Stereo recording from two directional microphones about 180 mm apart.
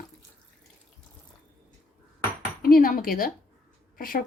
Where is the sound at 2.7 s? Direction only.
50° left (ahead or behind).